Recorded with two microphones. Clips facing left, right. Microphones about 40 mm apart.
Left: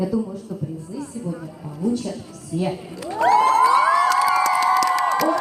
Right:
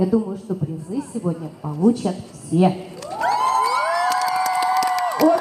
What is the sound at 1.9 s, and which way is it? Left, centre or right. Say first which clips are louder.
Speech: right 3 dB; right.